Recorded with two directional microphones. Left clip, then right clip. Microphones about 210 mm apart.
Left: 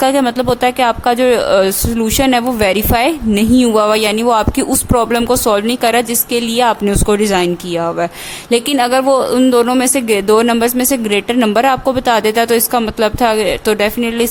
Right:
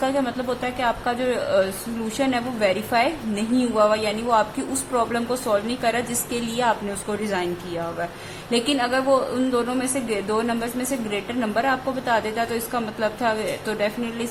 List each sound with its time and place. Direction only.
0.0 s speech: 50° left (ahead or behind)